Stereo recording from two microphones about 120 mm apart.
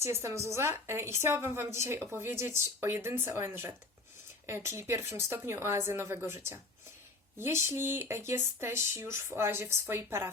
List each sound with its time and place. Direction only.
0.0 s a woman's voice: 25° right (ahead or behind)